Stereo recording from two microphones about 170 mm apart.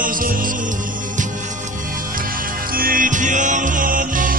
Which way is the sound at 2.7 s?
55° right (ahead or behind).